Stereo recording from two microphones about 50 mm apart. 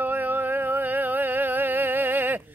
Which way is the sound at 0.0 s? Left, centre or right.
Right.